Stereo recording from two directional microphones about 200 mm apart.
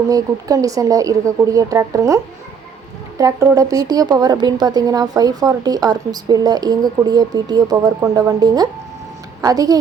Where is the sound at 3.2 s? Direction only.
15° right (ahead or behind).